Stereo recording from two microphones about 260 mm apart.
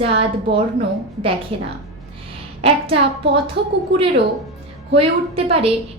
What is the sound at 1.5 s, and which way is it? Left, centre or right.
A woman's voice, right.